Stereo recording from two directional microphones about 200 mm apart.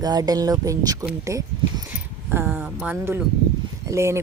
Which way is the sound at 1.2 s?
15° right (ahead or behind).